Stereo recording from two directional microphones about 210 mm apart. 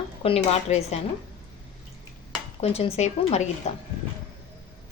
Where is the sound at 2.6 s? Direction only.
30° left (ahead or behind).